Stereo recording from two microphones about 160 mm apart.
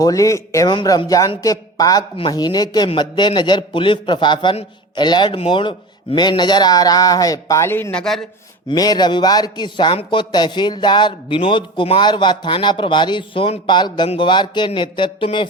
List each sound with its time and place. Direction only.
0.0 s speech: 20° left (ahead or behind); by 8.2 s 5° left (ahead or behind)
8.7 s speech: 25° left (ahead or behind)